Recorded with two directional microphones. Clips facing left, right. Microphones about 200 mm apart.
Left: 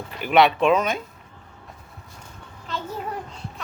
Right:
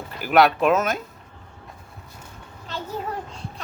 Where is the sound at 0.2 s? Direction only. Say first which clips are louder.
Even; centre (ahead or behind).